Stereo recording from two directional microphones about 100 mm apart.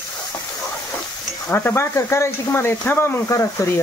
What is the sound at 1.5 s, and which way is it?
Speech, 20° left (ahead or behind).